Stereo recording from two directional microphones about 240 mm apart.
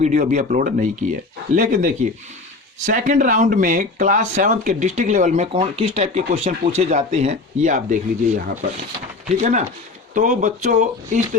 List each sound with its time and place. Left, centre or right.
0.0 s speech: right
9.4 s speech: right